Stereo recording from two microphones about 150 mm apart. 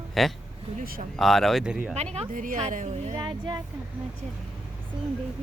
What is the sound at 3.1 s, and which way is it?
Speech, 30° right (ahead or behind).